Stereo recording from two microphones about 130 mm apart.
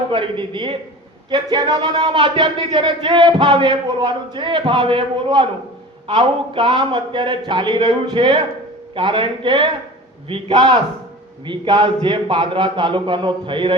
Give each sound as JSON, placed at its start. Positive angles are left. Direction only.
{"t": 0.1, "sound": "speech", "side_deg": -40}